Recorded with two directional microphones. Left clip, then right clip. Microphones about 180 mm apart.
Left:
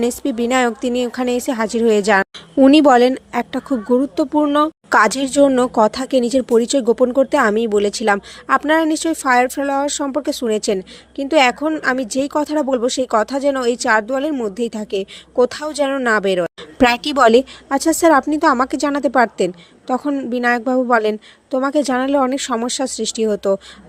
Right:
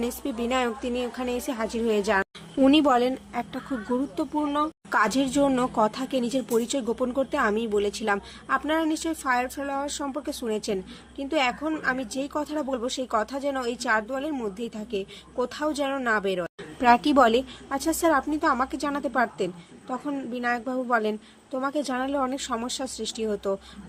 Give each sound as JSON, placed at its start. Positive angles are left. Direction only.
{"t": 0.0, "sound": "speech", "side_deg": 40}